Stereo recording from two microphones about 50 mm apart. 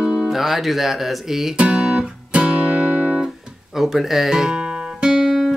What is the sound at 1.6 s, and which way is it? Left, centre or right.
Music, right.